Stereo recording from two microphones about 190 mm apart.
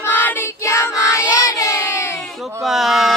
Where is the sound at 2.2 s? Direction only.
Centre (ahead or behind).